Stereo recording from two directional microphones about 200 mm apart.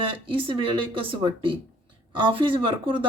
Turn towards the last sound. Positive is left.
turn(degrees=-25)  # may be behind; listen again after turning